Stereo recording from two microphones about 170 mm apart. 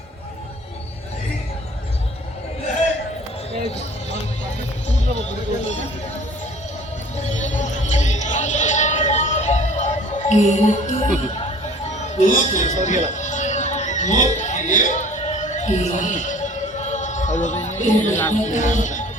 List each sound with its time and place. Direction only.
7.2 s music: 45° left (ahead or behind)
11.9 s speech: 45° left (ahead or behind)
13.1 s music: 45° left (ahead or behind)
18.3 s speech: 45° left (ahead or behind)